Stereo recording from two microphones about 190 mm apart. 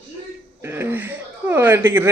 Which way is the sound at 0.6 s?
10° right (ahead or behind).